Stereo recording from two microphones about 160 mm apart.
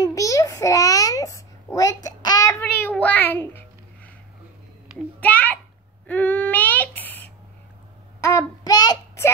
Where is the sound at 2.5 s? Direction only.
10° left (ahead or behind).